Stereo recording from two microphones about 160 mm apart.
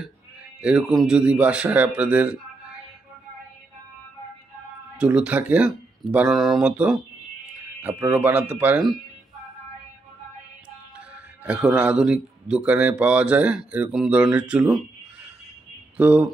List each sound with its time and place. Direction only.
0.6 s speech: 5° right (ahead or behind)
4.9 s speech: 5° right (ahead or behind)
11.0 s speech: 10° right (ahead or behind)
16.0 s speech: 10° right (ahead or behind)